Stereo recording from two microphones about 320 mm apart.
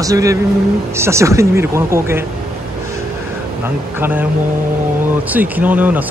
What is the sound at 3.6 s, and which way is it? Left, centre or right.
Speech, centre.